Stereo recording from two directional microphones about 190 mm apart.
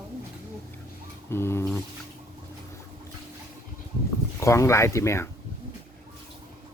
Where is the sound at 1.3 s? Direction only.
15° left (ahead or behind).